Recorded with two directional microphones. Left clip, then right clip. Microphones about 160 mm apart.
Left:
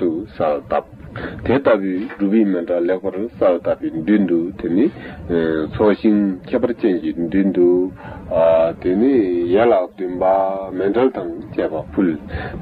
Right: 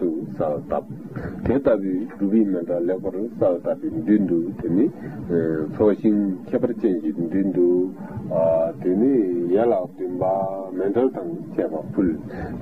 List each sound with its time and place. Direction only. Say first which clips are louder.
0.0 s a man's voice: left 5 dB; 30° left (ahead or behind)